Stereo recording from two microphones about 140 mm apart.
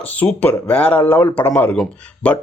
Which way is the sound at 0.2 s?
10° left (ahead or behind).